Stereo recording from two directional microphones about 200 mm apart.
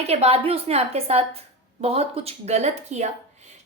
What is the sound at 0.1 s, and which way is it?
A woman's voice, 30° right (ahead or behind).